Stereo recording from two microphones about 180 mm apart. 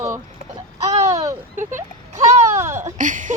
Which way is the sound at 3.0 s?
45° right (ahead or behind).